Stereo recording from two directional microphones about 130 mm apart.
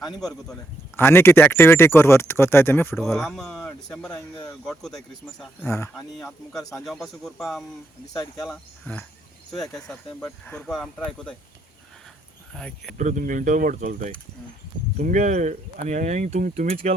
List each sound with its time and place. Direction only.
0.1 s speech: centre (ahead or behind)
0.9 s speech: 20° left (ahead or behind)
2.9 s speech: centre (ahead or behind)
5.6 s speech: 20° left (ahead or behind)
6.1 s speech: centre (ahead or behind)
8.1 s speech: 25° left (ahead or behind)
9.5 s speech: centre (ahead or behind)
12.5 s speech: 5° left (ahead or behind)
13.0 s speech: 85° right
14.9 s speech: 70° right (ahead or behind)